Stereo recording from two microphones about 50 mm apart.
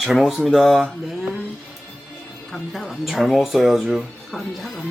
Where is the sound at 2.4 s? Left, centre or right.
Centre.